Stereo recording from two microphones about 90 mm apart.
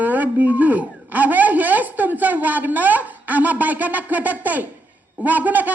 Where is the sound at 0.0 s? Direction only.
20° right (ahead or behind).